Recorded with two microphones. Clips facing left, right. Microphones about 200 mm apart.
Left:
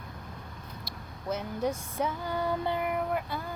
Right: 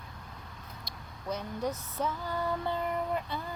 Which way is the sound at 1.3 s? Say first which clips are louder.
Left 3 dB; 10° left (ahead or behind).